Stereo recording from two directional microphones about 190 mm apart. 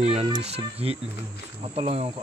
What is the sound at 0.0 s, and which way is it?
Cricket, 35° right (ahead or behind).